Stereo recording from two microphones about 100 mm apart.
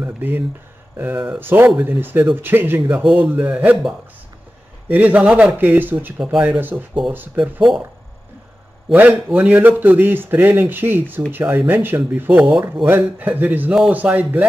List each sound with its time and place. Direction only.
0.0 s speech: 20° right (ahead or behind)
1.4 s a man's voice: 20° right (ahead or behind)
4.8 s a man's voice: 15° right (ahead or behind)
8.9 s a man's voice: 15° right (ahead or behind)